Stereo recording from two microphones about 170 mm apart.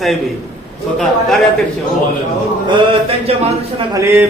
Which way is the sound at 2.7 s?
35° right (ahead or behind).